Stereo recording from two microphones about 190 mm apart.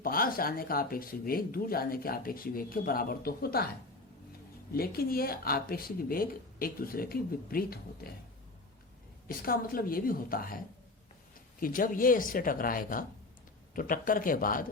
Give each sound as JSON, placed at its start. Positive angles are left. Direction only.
{"t": 0.0, "sound": "speech", "side_deg": 50}
{"t": 4.7, "sound": "speech", "side_deg": 50}
{"t": 9.2, "sound": "speech", "side_deg": 50}
{"t": 11.6, "sound": "speech", "side_deg": 45}